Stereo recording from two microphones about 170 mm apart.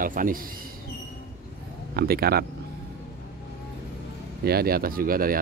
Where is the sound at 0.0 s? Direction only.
55° right (ahead or behind).